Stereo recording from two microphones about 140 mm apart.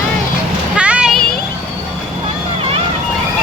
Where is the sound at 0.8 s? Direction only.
10° right (ahead or behind).